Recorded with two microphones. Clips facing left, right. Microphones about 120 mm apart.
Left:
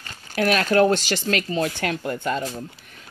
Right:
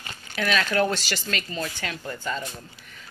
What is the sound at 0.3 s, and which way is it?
Speech, 45° left (ahead or behind).